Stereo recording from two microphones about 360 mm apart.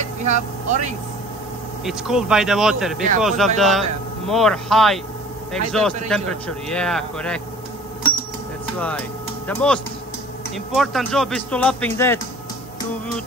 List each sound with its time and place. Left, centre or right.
0.0 s vehicle: centre
1.9 s a man's voice: centre
9.5 s a man's voice: centre